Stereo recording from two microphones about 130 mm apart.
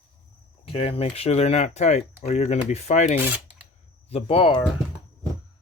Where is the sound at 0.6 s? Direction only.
45° left (ahead or behind).